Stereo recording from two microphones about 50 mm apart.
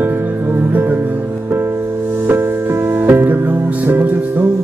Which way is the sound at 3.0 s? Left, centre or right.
Right.